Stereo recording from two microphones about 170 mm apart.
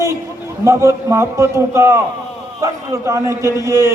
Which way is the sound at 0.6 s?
15° right (ahead or behind).